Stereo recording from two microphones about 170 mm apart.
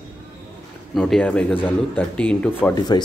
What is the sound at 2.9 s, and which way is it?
Speech, 25° left (ahead or behind).